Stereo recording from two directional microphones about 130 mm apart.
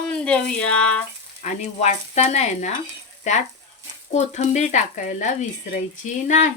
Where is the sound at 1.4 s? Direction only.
60° left (ahead or behind).